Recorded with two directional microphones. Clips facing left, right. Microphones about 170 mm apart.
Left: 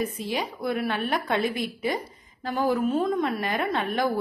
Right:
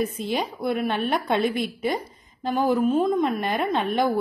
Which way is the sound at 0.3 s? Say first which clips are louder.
Right 2 dB; 20° right (ahead or behind).